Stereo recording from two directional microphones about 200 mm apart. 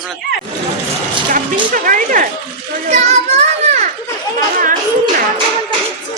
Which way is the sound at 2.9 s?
35° right (ahead or behind).